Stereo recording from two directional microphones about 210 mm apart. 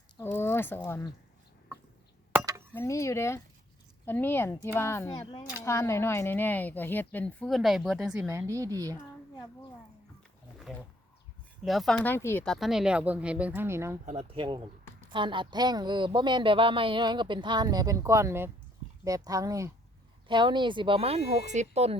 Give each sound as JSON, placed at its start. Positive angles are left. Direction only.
{"t": 0.2, "sound": "speech", "side_deg": 10}
{"t": 2.7, "sound": "speech", "side_deg": 15}
{"t": 10.7, "sound": "speech", "side_deg": 0}
{"t": 14.0, "sound": "a woman's voice", "side_deg": -30}